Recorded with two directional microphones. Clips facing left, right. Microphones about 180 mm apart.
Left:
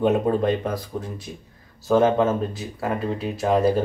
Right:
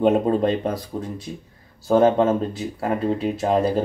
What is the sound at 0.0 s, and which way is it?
Speech, 30° right (ahead or behind).